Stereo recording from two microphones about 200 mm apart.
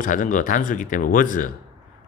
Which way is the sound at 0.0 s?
40° left (ahead or behind).